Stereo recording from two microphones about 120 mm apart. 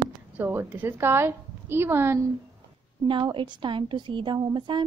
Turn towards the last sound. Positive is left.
turn(degrees=-40)  # may be behind; listen again after turning